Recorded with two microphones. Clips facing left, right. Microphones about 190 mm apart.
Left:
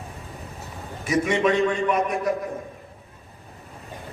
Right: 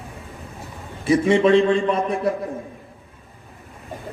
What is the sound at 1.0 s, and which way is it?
A man's voice, 30° right (ahead or behind).